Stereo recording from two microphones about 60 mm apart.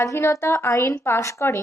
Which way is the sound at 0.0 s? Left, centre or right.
Left.